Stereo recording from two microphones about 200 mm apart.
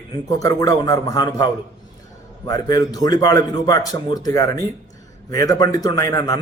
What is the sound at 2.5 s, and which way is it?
A man's voice, 20° left (ahead or behind).